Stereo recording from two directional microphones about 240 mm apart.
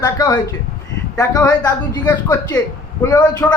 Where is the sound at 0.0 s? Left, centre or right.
Centre.